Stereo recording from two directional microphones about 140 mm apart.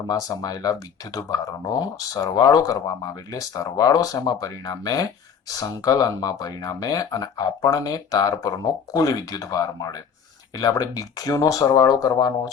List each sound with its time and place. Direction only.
0.1 s speech: 25° left (ahead or behind)